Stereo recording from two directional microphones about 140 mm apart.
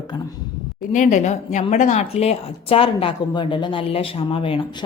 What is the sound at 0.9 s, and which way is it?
A woman's voice, 60° left (ahead or behind).